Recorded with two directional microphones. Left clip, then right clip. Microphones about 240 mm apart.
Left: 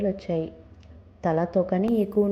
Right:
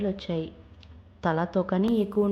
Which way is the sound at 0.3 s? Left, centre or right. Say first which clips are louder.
Left 5 dB; right.